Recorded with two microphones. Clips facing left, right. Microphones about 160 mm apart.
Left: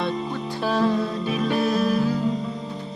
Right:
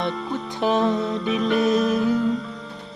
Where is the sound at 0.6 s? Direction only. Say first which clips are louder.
Right 1 dB; 20° right (ahead or behind).